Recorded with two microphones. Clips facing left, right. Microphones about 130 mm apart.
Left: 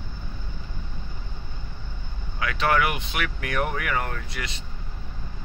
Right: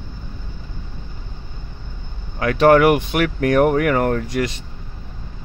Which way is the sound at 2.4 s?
45° right (ahead or behind).